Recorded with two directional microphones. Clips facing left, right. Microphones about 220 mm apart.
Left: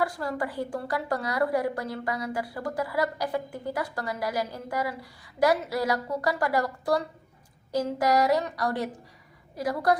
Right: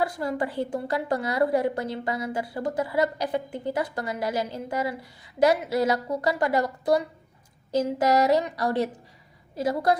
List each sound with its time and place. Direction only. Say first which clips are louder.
0.0 s a woman's voice: right 2 dB; 20° right (ahead or behind)